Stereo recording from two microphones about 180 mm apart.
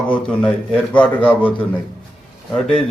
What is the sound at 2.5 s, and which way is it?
Speech, 5° left (ahead or behind).